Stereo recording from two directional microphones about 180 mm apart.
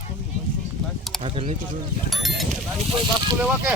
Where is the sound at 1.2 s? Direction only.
35° right (ahead or behind).